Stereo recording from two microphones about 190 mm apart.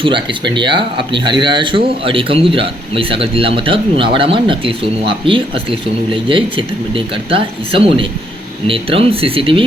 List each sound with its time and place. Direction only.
0.0 s a man's voice: 25° right (ahead or behind)